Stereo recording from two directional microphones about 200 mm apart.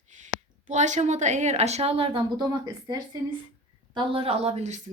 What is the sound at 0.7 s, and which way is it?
Speech, 35° right (ahead or behind).